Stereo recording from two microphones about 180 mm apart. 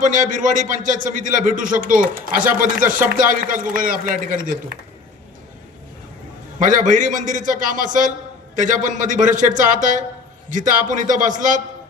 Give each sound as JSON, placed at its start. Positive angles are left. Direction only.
{"t": 0.0, "sound": "a man's voice", "side_deg": -45}
{"t": 6.6, "sound": "a man's voice", "side_deg": -45}